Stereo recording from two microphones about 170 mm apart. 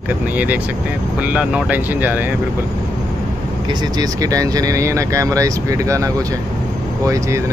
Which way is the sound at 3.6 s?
25° right (ahead or behind).